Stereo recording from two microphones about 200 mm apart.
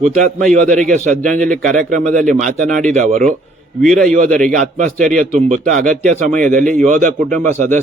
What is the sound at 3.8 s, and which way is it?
Speech, 5° left (ahead or behind).